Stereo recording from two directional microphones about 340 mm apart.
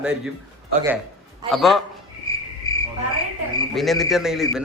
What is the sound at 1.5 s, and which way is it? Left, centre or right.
Speech, centre.